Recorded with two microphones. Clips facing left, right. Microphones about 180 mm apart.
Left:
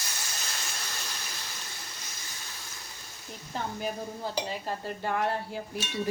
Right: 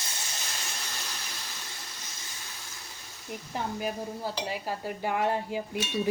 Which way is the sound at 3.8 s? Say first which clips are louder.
Right 1 dB; 10° right (ahead or behind).